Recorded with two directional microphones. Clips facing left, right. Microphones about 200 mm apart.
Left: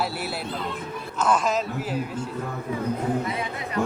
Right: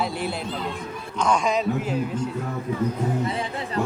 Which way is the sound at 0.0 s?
5° left (ahead or behind).